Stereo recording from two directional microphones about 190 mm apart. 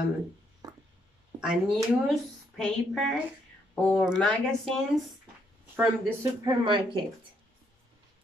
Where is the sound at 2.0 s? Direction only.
Centre (ahead or behind).